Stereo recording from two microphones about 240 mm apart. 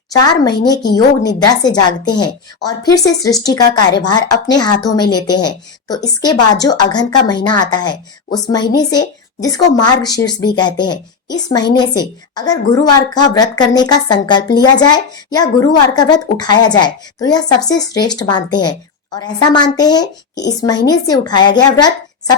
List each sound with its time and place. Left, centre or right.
0.4 s a woman's voice: centre